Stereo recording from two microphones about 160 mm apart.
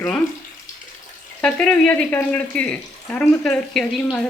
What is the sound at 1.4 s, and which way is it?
Speech, 5° left (ahead or behind).